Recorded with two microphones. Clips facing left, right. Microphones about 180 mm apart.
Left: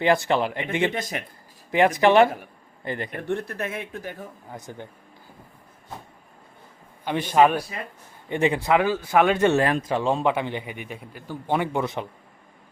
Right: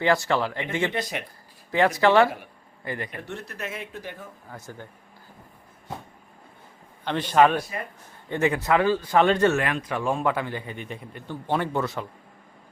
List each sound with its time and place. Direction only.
0.0 s speech: 20° left (ahead or behind)
3.1 s speech: 55° left (ahead or behind)
4.5 s speech: 20° left (ahead or behind)
7.0 s speech: 10° left (ahead or behind)
9.6 s speech: 35° left (ahead or behind); by 12.0 s 15° left (ahead or behind)